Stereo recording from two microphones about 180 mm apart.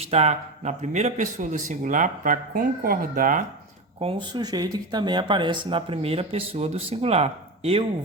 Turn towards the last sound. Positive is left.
turn(degrees=-35)  # may be behind; listen again after turning